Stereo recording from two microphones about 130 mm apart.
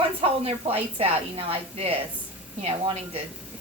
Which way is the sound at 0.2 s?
50° right (ahead or behind).